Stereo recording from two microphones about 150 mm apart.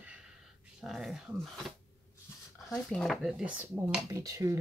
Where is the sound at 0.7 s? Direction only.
Centre (ahead or behind).